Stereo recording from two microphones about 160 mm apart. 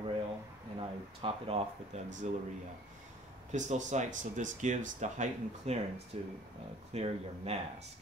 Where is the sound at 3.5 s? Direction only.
50° right (ahead or behind).